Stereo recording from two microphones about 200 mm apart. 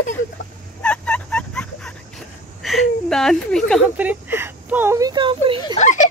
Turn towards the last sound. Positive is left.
turn(degrees=35)  # may be behind; listen again after turning